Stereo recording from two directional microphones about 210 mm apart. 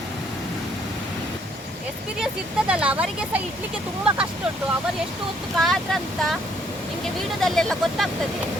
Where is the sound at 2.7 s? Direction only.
5° right (ahead or behind).